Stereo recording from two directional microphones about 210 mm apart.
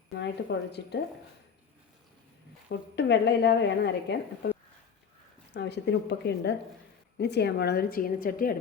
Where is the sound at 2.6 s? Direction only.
55° left (ahead or behind).